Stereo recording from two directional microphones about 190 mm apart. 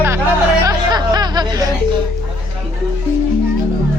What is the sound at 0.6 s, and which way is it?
Music, 20° right (ahead or behind).